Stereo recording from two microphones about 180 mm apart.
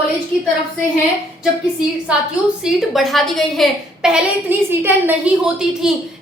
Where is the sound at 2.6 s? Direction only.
Centre (ahead or behind).